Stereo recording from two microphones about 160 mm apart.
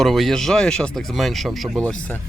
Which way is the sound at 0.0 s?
Centre (ahead or behind).